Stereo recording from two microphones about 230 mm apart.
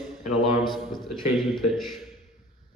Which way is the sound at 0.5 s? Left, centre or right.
Centre.